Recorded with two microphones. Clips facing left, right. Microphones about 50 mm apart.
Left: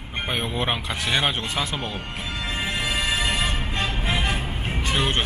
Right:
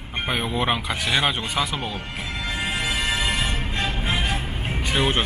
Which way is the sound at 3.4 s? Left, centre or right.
Left.